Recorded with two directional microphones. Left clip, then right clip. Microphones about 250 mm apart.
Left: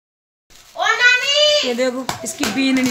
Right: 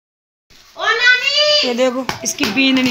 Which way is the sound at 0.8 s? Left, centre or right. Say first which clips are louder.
Even; left.